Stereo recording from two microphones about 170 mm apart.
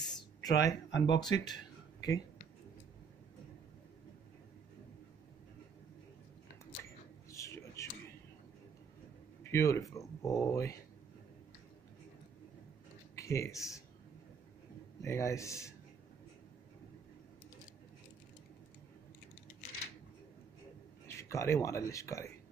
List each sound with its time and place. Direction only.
0.0 s a sound: 20° left (ahead or behind)
1.3 s speech: 25° left (ahead or behind)
7.2 s a sound: 20° left (ahead or behind)
9.4 s speech: 15° left (ahead or behind)
13.1 s speech: 15° left (ahead or behind)
15.0 s a man's voice: 15° left (ahead or behind)
21.1 s speech: 15° left (ahead or behind)